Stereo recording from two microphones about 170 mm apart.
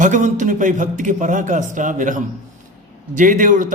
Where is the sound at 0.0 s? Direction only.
45° right (ahead or behind).